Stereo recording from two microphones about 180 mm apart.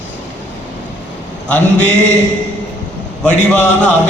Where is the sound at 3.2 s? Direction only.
5° left (ahead or behind).